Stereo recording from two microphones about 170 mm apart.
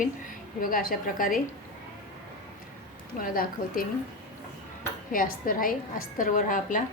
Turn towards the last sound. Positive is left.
turn(degrees=50)  # may be behind; listen again after turning